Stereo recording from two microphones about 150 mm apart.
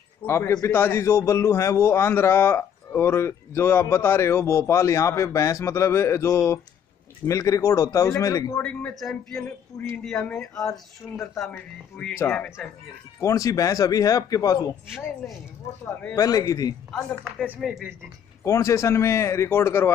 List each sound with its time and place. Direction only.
0.2 s a man's voice: 15° left (ahead or behind)
8.6 s speech: 10° left (ahead or behind)
10.6 s a man's voice: 20° left (ahead or behind)
16.2 s a man's voice: 25° left (ahead or behind)
17.6 s speech: centre (ahead or behind)
18.4 s a man's voice: 20° left (ahead or behind)